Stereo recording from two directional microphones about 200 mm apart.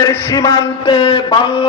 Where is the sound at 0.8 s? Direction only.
25° left (ahead or behind).